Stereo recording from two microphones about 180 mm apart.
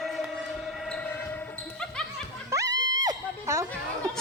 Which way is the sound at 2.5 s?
20° right (ahead or behind).